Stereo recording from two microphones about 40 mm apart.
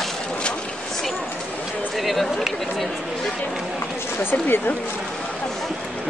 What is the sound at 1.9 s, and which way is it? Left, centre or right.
Speech, centre.